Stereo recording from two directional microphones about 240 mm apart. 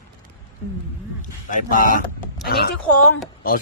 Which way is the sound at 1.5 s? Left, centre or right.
Left.